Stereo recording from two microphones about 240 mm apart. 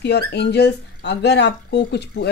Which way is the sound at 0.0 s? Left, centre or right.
Left.